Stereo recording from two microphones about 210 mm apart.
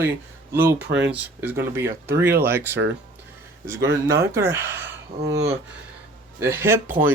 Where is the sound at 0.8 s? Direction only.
55° right (ahead or behind).